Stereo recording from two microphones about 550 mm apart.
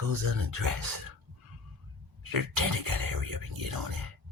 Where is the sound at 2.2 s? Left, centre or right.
Right.